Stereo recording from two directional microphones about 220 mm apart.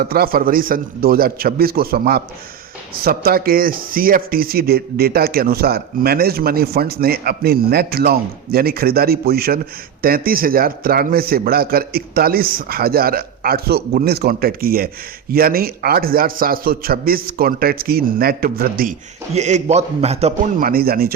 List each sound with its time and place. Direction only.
0.0 s a man's voice: 45° right (ahead or behind)